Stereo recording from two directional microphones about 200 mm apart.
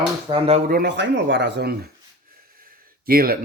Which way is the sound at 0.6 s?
50° right (ahead or behind).